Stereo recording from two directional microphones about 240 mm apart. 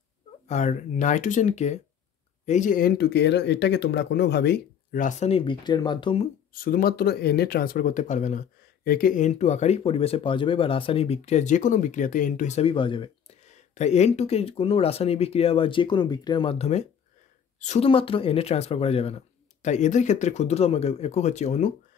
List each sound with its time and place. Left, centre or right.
0.5 s speech: left
6.5 s speech: left